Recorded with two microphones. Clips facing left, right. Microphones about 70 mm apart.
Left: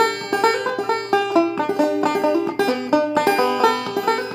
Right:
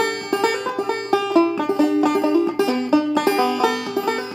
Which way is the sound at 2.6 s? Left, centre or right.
Left.